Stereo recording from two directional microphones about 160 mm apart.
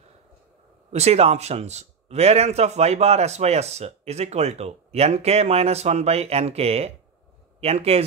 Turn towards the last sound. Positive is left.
turn(degrees=-40)  # may be behind; listen again after turning